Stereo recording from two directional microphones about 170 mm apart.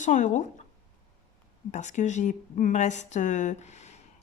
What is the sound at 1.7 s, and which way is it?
Speech, 45° left (ahead or behind).